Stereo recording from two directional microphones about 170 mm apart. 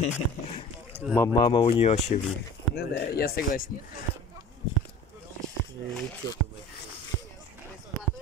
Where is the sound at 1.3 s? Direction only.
30° left (ahead or behind).